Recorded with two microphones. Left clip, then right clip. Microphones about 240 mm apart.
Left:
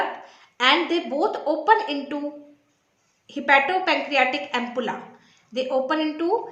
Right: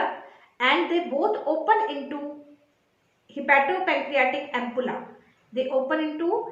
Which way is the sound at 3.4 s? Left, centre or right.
Left.